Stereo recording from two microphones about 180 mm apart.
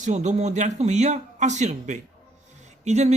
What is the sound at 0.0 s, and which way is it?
Speech, 40° right (ahead or behind).